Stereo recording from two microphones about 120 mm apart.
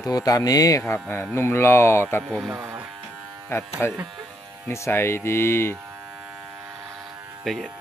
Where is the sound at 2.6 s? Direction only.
25° right (ahead or behind).